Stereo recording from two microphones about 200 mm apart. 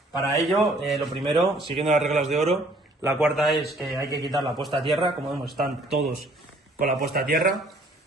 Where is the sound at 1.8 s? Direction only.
35° right (ahead or behind).